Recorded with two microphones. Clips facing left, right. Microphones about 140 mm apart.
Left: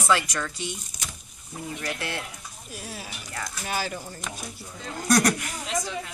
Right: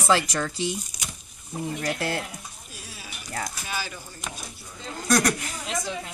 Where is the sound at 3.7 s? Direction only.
50° left (ahead or behind).